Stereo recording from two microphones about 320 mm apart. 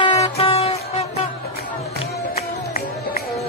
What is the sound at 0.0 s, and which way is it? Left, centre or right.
Music, centre.